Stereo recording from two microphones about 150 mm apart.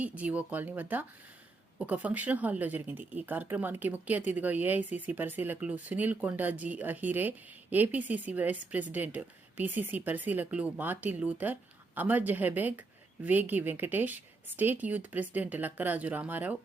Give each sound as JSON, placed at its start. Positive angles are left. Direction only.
{"t": 0.0, "sound": "speech", "side_deg": -10}